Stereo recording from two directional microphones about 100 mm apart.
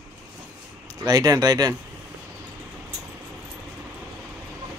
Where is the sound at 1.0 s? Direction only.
40° right (ahead or behind).